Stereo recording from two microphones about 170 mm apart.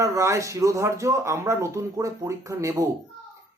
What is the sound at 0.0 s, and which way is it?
Speech, 20° right (ahead or behind).